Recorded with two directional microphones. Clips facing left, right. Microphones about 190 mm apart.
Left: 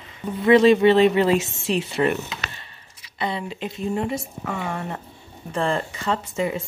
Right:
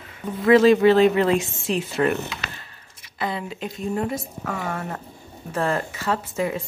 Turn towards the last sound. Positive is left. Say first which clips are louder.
# even
turn(degrees=0)  # may be behind; listen again after turning